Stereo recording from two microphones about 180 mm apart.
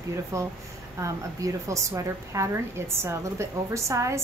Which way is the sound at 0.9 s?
15° right (ahead or behind).